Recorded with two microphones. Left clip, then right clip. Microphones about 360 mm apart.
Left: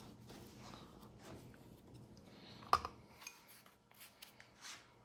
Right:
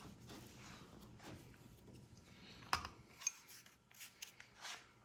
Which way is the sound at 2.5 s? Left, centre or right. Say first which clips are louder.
Left 6 dB; left.